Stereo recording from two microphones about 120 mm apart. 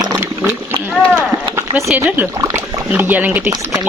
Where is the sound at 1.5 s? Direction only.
25° right (ahead or behind).